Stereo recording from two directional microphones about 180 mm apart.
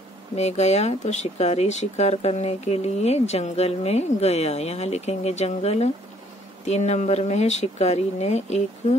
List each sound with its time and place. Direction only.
0.4 s speech: 40° left (ahead or behind)